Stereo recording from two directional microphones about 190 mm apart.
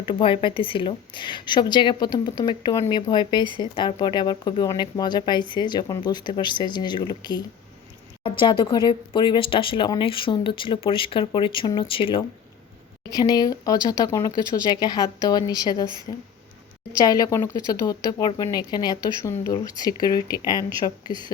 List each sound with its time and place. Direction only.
0.1 s speech: 25° left (ahead or behind)
17.0 s speech: 20° left (ahead or behind)